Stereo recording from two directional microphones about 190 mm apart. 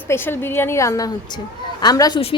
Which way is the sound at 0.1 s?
10° left (ahead or behind).